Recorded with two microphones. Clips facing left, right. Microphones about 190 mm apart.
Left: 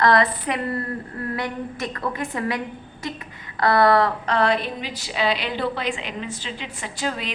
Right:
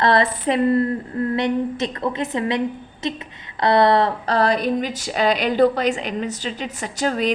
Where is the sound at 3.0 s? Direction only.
20° right (ahead or behind).